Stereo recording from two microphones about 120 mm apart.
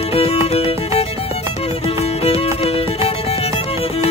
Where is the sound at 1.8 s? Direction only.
55° left (ahead or behind).